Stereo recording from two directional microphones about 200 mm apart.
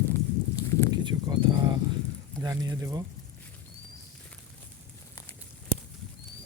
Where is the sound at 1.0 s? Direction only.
20° right (ahead or behind).